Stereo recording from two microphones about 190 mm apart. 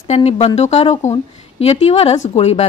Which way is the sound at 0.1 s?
35° left (ahead or behind).